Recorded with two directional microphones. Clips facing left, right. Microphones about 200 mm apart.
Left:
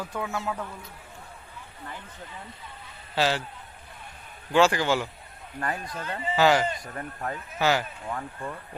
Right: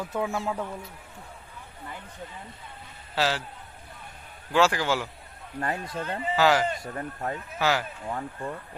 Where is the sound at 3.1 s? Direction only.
Centre (ahead or behind).